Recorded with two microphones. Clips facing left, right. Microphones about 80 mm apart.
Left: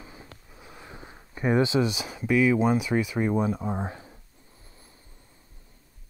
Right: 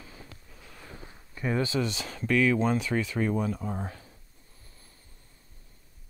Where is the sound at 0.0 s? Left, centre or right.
Left.